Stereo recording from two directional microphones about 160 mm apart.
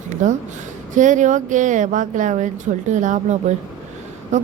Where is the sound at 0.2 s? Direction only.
50° right (ahead or behind).